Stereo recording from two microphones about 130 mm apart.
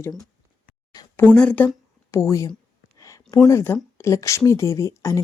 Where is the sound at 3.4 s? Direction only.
20° left (ahead or behind).